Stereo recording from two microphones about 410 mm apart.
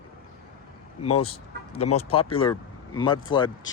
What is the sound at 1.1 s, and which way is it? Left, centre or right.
Speech, centre.